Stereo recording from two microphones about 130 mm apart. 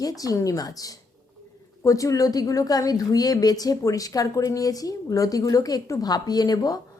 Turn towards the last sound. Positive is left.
turn(degrees=30)  # may be behind; listen again after turning